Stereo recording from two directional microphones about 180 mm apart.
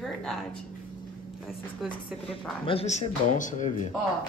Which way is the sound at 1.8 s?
30° left (ahead or behind).